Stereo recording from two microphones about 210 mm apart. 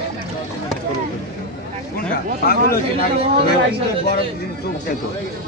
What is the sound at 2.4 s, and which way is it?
Speech, 45° left (ahead or behind).